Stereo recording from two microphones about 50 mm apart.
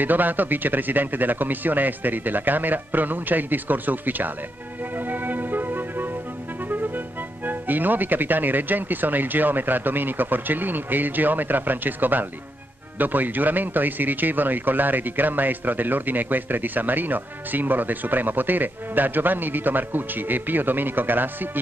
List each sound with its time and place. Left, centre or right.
0.0 s speech: right
4.9 s music: right
7.4 s speech: right